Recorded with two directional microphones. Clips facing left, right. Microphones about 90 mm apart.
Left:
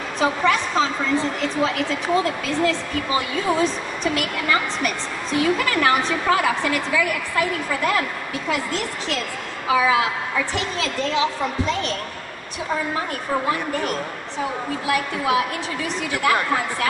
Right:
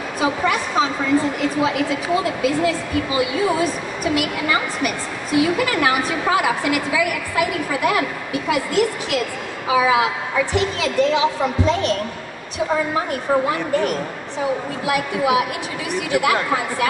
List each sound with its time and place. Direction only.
0.2 s speech: 10° right (ahead or behind)
14.9 s speech: 15° right (ahead or behind)